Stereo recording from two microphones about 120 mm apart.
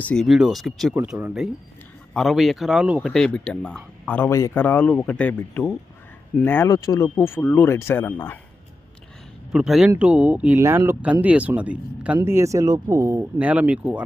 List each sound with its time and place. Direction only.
0.0 s speech: 10° left (ahead or behind)
0.3 s speech: 5° right (ahead or behind)
2.1 s speech: centre (ahead or behind); by 6.7 s 15° left (ahead or behind)
6.7 s speech: 30° left (ahead or behind)
9.5 s speech: 5° right (ahead or behind)
10.6 s speech: 20° right (ahead or behind)
12.3 s speech: 25° right (ahead or behind)
13.4 s speech: 10° right (ahead or behind)